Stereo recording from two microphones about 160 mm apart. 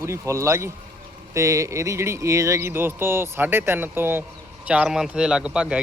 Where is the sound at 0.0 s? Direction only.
15° right (ahead or behind).